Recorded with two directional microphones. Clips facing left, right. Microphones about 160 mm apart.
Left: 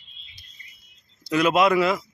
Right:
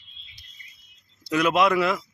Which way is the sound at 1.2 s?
Centre (ahead or behind).